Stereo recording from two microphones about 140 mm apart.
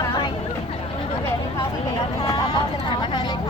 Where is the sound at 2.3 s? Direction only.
40° left (ahead or behind).